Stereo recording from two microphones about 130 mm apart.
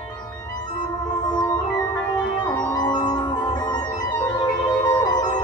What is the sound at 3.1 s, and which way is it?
Music, 35° left (ahead or behind).